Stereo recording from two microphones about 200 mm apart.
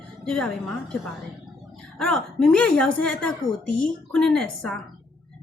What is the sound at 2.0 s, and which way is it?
A woman's voice, 5° left (ahead or behind).